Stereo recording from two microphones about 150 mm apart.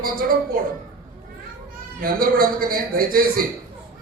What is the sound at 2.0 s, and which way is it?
A man's voice, 75° right (ahead or behind).